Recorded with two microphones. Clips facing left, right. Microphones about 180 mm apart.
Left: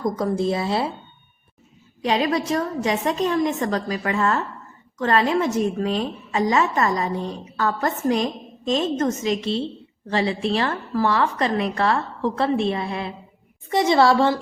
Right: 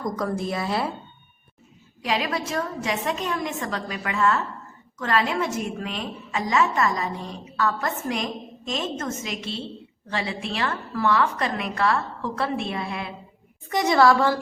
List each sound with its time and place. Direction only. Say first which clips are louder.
0.0 s speech: left 5 dB; 25° left (ahead or behind)
2.0 s a woman's voice: left 5 dB; 30° left (ahead or behind)